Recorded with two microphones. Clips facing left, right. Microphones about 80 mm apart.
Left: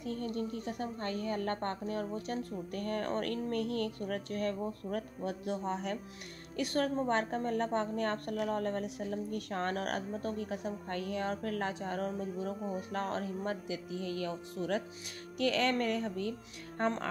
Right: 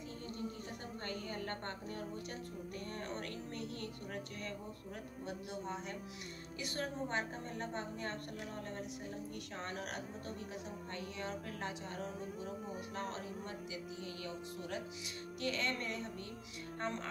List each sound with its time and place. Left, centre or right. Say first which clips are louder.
0.1 s a woman's voice: left 9 dB; left